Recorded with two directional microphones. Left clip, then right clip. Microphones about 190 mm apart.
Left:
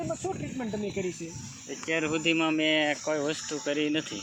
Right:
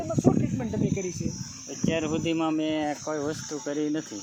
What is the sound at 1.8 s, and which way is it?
Speech, 35° right (ahead or behind).